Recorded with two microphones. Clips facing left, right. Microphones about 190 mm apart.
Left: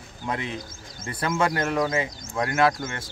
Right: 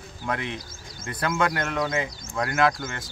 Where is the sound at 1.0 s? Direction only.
30° left (ahead or behind).